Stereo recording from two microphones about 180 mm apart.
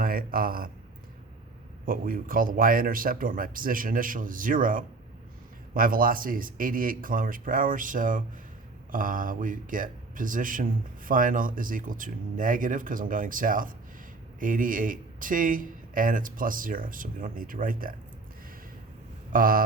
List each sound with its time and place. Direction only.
0.0 s speech: 55° right (ahead or behind)
1.8 s speech: 50° right (ahead or behind)
19.3 s speech: 50° right (ahead or behind)